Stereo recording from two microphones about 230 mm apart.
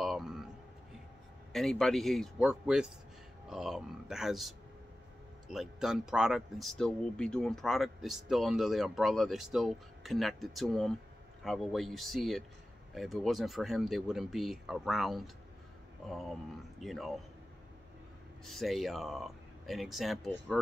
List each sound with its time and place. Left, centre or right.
0.0 s a sound: centre
1.5 s speech: centre
18.4 s speech: centre